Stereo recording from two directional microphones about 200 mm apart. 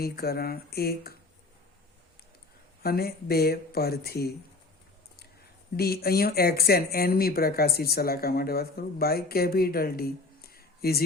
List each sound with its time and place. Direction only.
0.0 s speech: 50° left (ahead or behind)
2.8 s speech: 50° left (ahead or behind)
5.7 s speech: 50° left (ahead or behind)